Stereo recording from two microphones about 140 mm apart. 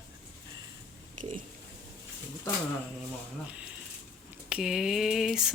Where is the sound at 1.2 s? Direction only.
65° right (ahead or behind).